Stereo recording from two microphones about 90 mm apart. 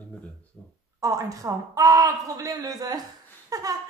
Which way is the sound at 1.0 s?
40° right (ahead or behind).